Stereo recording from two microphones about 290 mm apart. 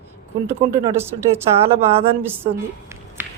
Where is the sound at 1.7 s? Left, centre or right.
Centre.